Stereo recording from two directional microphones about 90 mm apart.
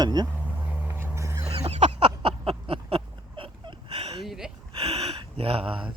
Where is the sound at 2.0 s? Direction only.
90° right.